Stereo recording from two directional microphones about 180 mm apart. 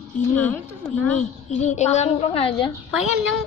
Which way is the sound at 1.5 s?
40° left (ahead or behind).